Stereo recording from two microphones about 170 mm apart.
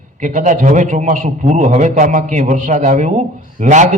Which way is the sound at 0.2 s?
45° right (ahead or behind).